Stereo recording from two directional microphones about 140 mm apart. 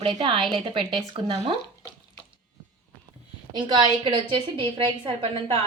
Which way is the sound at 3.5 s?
30° right (ahead or behind).